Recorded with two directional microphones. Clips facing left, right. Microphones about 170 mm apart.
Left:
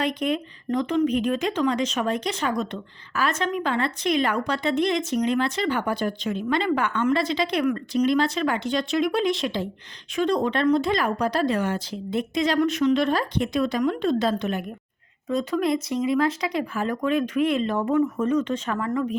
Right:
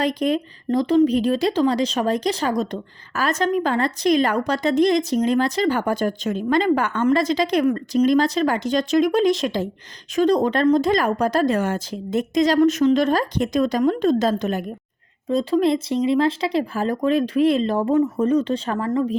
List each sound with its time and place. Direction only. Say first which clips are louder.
0.0 s speech: right 4 dB; 35° right (ahead or behind)